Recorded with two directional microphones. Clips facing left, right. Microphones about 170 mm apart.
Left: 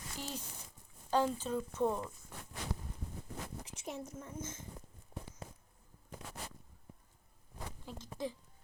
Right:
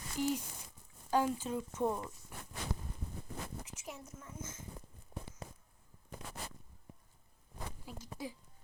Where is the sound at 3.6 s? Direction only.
35° left (ahead or behind).